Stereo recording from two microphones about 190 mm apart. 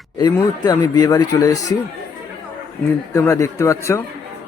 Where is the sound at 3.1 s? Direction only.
15° left (ahead or behind).